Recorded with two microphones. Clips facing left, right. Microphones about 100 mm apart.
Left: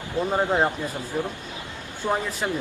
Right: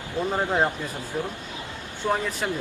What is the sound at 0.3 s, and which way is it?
Speech, 20° left (ahead or behind).